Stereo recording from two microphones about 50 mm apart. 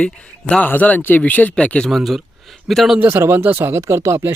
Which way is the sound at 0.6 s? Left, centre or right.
Left.